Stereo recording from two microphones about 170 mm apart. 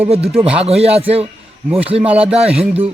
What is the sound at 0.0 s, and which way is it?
Speech, 35° right (ahead or behind).